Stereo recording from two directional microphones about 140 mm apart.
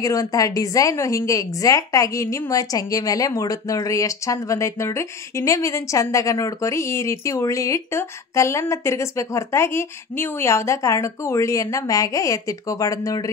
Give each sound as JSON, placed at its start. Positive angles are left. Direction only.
{"t": 0.0, "sound": "a woman's voice", "side_deg": 25}